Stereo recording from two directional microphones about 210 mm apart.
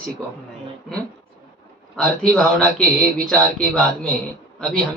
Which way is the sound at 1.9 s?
5° left (ahead or behind).